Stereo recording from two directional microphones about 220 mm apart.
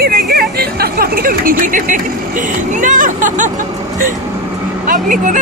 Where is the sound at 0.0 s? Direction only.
45° right (ahead or behind).